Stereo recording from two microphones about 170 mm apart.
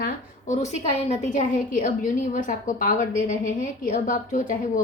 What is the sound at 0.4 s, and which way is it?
A woman's voice, 45° left (ahead or behind).